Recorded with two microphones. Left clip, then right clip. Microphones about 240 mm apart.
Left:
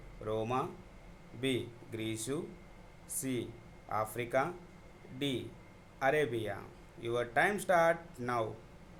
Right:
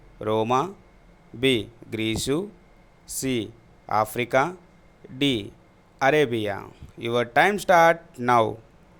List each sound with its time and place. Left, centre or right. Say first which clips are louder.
0.2 s speech: right 12 dB; right